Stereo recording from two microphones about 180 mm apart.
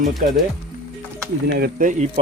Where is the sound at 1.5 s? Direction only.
50° right (ahead or behind).